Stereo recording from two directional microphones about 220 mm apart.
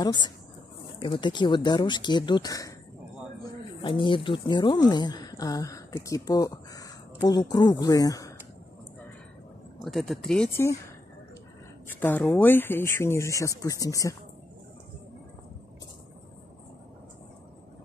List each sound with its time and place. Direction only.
0.0 s speech: 20° left (ahead or behind)
3.8 s speech: 20° left (ahead or behind)
9.8 s speech: centre (ahead or behind)
11.9 s speech: 10° left (ahead or behind)